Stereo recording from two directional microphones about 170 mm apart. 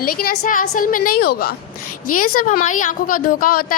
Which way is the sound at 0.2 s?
55° left (ahead or behind).